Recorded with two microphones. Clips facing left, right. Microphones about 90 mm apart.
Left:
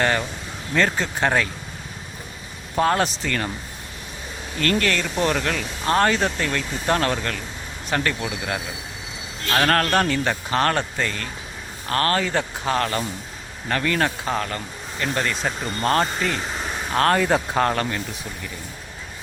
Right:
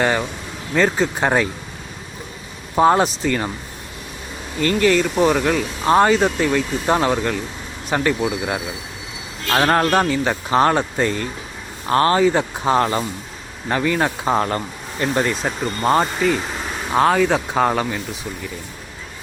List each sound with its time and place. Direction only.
0.0 s speech: 15° right (ahead or behind)
2.7 s speech: 15° right (ahead or behind)
4.6 s speech: 10° right (ahead or behind)
14.3 s speech: 30° right (ahead or behind); by 18.0 s 10° right (ahead or behind)